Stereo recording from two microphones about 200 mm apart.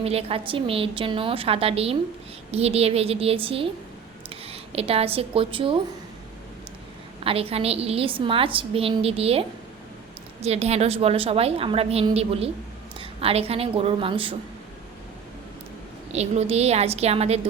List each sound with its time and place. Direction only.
0.0 s a woman's voice: 30° right (ahead or behind)
7.3 s a woman's voice: 30° right (ahead or behind)
16.1 s a woman's voice: 35° right (ahead or behind)